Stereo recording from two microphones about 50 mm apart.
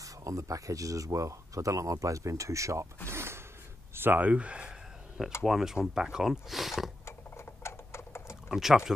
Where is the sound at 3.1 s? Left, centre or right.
Right.